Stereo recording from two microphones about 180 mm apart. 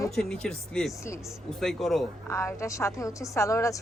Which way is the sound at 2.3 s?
15° left (ahead or behind).